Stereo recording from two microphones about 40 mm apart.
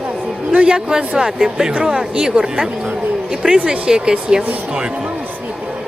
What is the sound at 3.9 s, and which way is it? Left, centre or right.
Speech, centre.